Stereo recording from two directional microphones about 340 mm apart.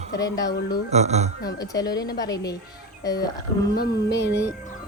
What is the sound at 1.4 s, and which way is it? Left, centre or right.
A woman's voice, centre.